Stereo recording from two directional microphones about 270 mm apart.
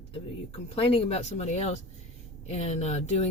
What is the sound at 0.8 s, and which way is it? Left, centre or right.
Speech, centre.